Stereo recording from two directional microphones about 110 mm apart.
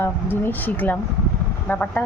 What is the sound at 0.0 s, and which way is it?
Speech, 20° left (ahead or behind).